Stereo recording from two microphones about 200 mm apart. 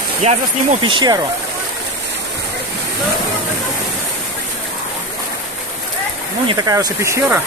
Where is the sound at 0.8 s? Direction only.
20° right (ahead or behind).